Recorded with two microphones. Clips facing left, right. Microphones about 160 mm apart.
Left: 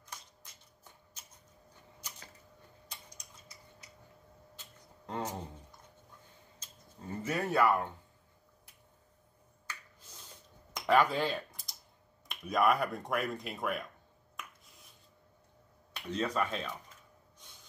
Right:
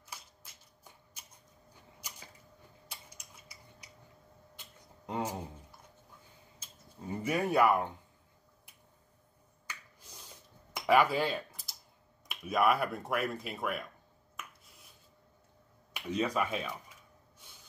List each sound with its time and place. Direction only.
0.0 s shuffling cards: 10° right (ahead or behind)
2.0 s a sound: 10° right (ahead or behind)
6.6 s speech: 10° right (ahead or behind)
10.7 s computer keyboard: 10° right (ahead or behind)
12.3 s speech: 5° right (ahead or behind)
15.9 s speech: 10° right (ahead or behind)